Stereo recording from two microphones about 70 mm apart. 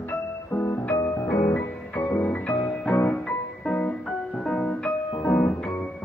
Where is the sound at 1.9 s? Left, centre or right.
Left.